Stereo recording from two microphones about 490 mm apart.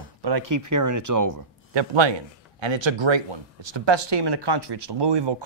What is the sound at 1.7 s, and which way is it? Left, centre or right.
Speech, right.